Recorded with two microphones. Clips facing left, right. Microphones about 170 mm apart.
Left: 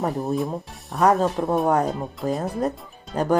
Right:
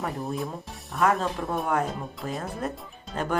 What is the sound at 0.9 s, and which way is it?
Speech, 40° left (ahead or behind).